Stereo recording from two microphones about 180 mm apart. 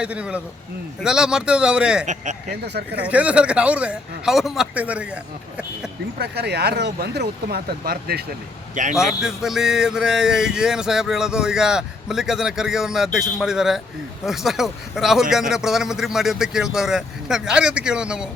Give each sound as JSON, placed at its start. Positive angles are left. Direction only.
{"t": 0.0, "sound": "speech", "side_deg": -5}
{"t": 2.5, "sound": "speech", "side_deg": -60}
{"t": 3.0, "sound": "speech", "side_deg": -5}
{"t": 6.1, "sound": "speech", "side_deg": -65}
{"t": 8.7, "sound": "a man's voice", "side_deg": -45}
{"t": 9.0, "sound": "speech", "side_deg": -5}